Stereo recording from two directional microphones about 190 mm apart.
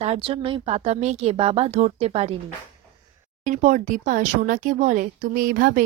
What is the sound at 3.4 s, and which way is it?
Speech, 40° right (ahead or behind).